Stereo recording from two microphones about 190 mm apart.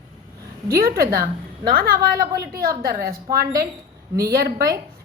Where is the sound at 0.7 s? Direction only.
55° right (ahead or behind).